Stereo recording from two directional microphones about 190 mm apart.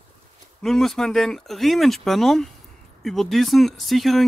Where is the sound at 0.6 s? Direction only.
Centre (ahead or behind).